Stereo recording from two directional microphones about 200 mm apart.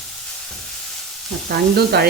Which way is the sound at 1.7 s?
55° right (ahead or behind).